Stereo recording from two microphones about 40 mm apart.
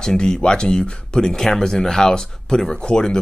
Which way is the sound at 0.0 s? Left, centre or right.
Centre.